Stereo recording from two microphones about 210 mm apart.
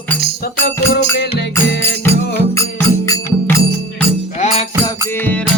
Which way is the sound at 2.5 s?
15° left (ahead or behind).